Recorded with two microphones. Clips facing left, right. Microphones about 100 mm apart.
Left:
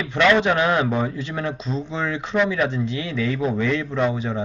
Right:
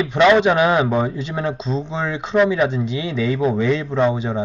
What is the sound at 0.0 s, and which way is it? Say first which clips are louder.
Speech: right 4 dB; 20° right (ahead or behind).